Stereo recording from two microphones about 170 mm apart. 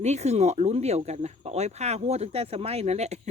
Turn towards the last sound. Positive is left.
turn(degrees=-40)  # may be behind; listen again after turning